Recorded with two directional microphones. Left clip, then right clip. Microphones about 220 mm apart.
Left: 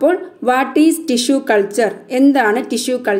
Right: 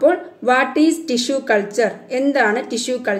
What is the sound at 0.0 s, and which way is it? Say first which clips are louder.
A woman's voice: left 1 dB; 30° left (ahead or behind).